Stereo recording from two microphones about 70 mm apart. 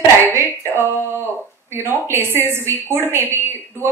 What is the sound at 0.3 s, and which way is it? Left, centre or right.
Female singing, right.